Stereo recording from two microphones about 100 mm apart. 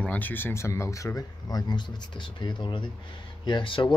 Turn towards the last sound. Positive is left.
turn(degrees=55)  # may be behind; listen again after turning